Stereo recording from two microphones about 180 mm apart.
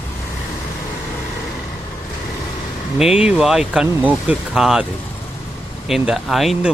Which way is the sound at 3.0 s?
5° right (ahead or behind).